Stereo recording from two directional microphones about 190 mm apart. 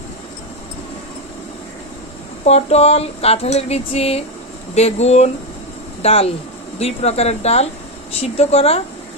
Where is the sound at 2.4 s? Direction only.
35° left (ahead or behind).